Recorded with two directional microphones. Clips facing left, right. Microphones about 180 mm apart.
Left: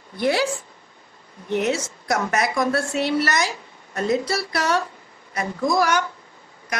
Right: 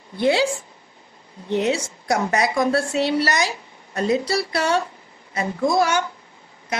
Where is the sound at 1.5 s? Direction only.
30° right (ahead or behind).